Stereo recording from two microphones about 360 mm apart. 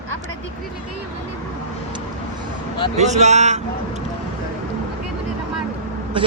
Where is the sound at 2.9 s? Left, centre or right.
Centre.